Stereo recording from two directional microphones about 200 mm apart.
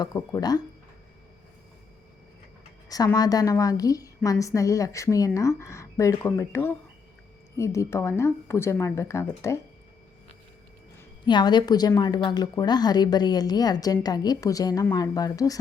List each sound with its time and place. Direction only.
0.0 s a woman's voice: 20° left (ahead or behind)
2.9 s a woman's voice: 20° left (ahead or behind)
11.3 s a woman's voice: 20° left (ahead or behind)